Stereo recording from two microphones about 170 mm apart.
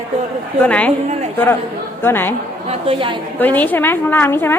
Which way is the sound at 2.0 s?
15° left (ahead or behind).